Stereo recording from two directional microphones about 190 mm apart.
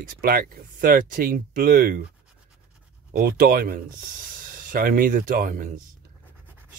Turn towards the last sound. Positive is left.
turn(degrees=-45)  # may be behind; listen again after turning